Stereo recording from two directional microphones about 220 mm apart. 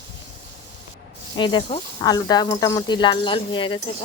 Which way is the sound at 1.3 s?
20° left (ahead or behind).